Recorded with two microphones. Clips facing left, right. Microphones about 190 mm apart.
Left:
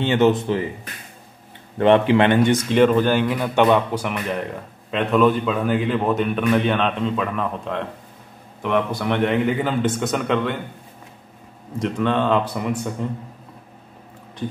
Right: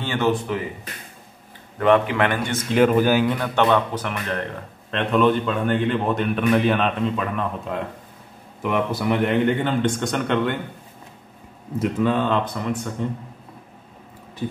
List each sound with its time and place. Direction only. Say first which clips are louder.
0.0 s speech: left 5 dB; 20° left (ahead or behind)
1.8 s speech: left 3 dB; 30° left (ahead or behind)
2.7 s a man's voice: right 2 dB; 5° right (ahead or behind)
3.3 s a man's voice: left 2 dB; 10° left (ahead or behind)
11.8 s a man's voice: even; 5° right (ahead or behind)
12.4 s a man's voice: left 2 dB; 10° left (ahead or behind)